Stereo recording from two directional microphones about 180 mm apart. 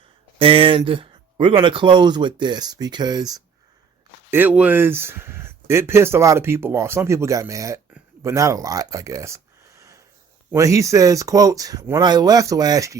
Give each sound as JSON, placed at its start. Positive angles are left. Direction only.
{"t": 0.3, "sound": "speech", "side_deg": -30}
{"t": 4.3, "sound": "speech", "side_deg": -10}